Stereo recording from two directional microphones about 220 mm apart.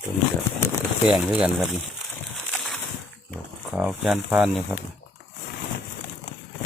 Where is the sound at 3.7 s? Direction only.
5° right (ahead or behind).